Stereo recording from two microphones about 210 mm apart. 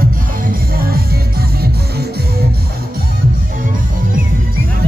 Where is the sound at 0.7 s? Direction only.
45° right (ahead or behind).